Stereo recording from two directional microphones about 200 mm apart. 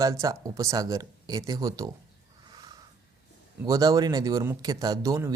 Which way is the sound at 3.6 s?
15° right (ahead or behind).